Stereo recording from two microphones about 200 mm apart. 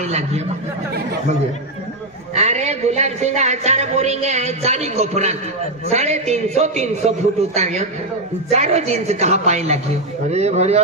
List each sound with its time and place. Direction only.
0.0 s speech: 35° right (ahead or behind)
2.3 s speech: 35° right (ahead or behind)